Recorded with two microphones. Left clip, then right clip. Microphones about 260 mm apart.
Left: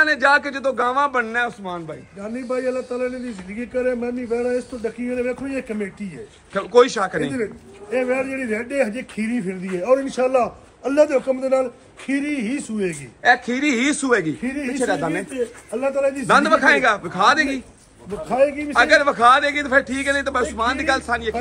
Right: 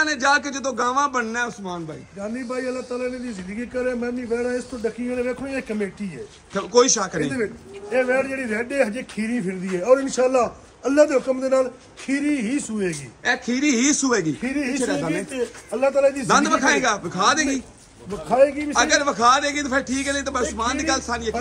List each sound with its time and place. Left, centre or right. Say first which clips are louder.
0.0 s a man's voice: left 4 dB; centre
2.1 s speech: left 3 dB; right
6.5 s a man's voice: left 2 dB; centre
7.9 s speech: right 1 dB; right
13.2 s a man's voice: left 5 dB; centre
14.4 s speech: right 1 dB; right
14.7 s speech: left 5 dB; centre
15.3 s speech: left 1 dB; right
16.3 s a man's voice: left 3 dB; centre
18.3 s speech: right 1 dB; right
18.7 s a man's voice: left 4 dB; centre